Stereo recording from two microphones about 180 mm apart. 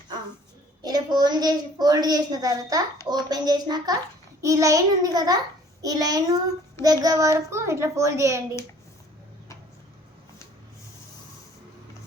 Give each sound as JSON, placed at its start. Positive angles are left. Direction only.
{"t": 0.8, "sound": "a woman's voice", "side_deg": -20}